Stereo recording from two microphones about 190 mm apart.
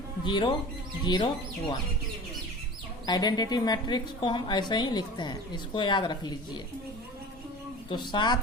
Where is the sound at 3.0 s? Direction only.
20° left (ahead or behind).